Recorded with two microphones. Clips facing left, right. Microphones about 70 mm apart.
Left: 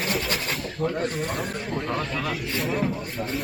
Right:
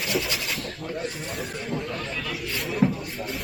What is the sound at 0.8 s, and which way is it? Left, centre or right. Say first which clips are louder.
Speech: left 10 dB; left.